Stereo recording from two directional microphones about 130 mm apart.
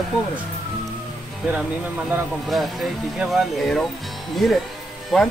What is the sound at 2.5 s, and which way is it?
Speech, centre (ahead or behind).